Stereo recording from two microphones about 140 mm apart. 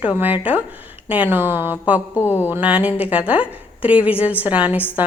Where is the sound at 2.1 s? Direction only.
20° left (ahead or behind).